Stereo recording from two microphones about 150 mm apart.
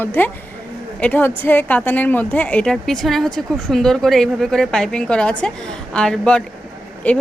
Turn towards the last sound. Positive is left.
turn(degrees=10)  # may be behind; listen again after turning